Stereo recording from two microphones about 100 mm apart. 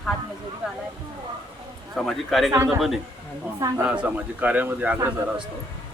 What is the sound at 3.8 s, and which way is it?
A woman's voice, 15° right (ahead or behind).